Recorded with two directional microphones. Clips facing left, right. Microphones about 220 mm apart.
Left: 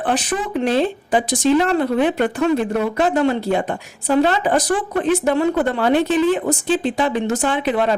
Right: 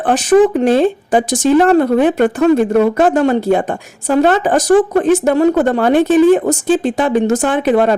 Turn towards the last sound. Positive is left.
turn(degrees=-45)  # may be behind; listen again after turning